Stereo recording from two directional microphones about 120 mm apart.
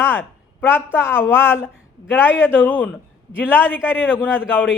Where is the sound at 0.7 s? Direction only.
20° left (ahead or behind).